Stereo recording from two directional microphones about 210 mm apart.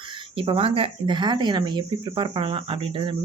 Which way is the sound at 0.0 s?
25° right (ahead or behind).